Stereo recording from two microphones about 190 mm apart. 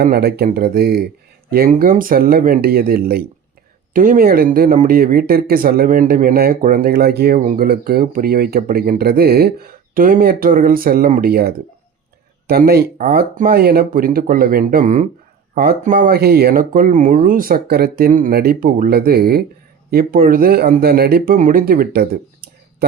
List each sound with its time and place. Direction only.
0.0 s speech: 55° right (ahead or behind)